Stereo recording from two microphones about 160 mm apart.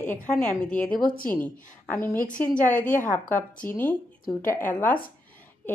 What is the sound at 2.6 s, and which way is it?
Speech, 55° left (ahead or behind).